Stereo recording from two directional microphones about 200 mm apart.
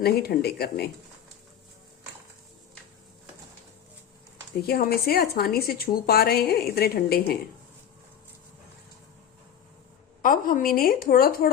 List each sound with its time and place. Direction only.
0.0 s a woman's voice: 50° left (ahead or behind)
4.6 s a woman's voice: 50° left (ahead or behind)
10.2 s a woman's voice: 45° left (ahead or behind)